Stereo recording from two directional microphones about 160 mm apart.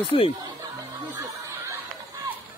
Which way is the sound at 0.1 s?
30° left (ahead or behind).